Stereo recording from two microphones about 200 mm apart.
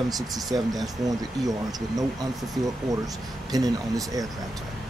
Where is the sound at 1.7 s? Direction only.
20° right (ahead or behind).